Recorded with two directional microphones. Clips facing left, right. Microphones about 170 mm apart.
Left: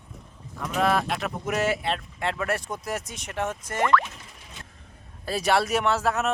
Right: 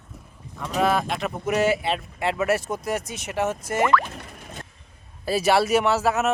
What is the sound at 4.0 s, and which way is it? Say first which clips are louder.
Music: right 4 dB; 55° right (ahead or behind).